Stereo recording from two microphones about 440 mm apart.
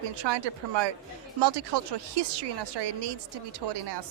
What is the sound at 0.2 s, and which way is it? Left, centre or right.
Speech, right.